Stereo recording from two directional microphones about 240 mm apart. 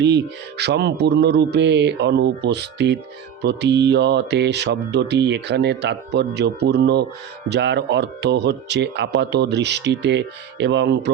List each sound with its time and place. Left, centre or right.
0.0 s speech: right